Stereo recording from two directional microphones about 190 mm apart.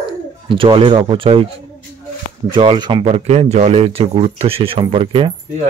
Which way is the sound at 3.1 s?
35° right (ahead or behind).